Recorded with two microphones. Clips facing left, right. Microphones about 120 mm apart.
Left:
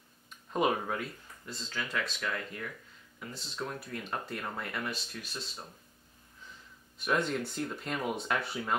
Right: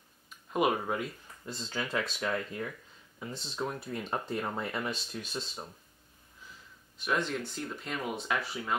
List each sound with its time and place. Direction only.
0.3 s a sound: 5° right (ahead or behind)
0.8 s speech: 20° right (ahead or behind)
1.5 s speech: 30° right (ahead or behind)
7.0 s speech: centre (ahead or behind)